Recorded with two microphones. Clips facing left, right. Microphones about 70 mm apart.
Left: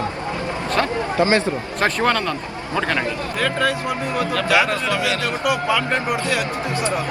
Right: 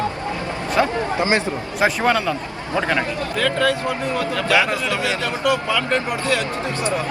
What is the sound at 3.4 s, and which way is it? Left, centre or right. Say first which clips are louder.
Speech: right 2 dB; left.